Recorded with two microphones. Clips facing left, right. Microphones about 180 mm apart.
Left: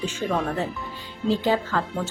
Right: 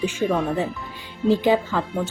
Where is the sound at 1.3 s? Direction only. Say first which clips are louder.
Right 4 dB; 15° right (ahead or behind).